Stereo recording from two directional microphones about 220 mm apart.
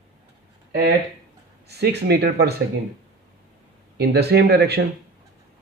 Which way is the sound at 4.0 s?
45° right (ahead or behind).